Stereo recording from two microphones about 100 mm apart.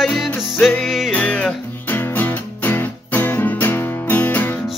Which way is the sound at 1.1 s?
10° left (ahead or behind).